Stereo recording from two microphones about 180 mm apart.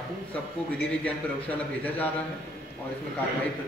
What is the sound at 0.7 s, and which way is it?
A man's voice, 10° left (ahead or behind).